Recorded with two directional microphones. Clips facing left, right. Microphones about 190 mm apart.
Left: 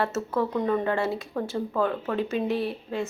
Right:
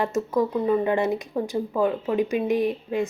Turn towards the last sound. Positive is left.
turn(degrees=-15)  # may be behind; listen again after turning